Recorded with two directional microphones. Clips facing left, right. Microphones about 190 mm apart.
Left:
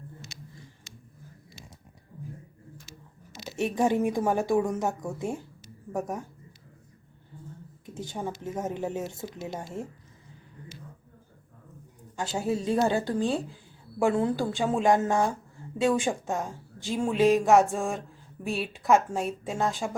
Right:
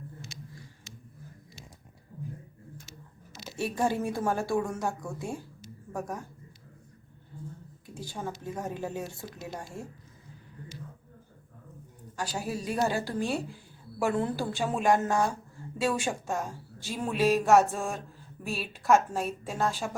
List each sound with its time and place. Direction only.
3.3 s speech: 20° left (ahead or behind)
7.9 s speech: 20° left (ahead or behind)
12.1 s a woman's voice: 25° left (ahead or behind)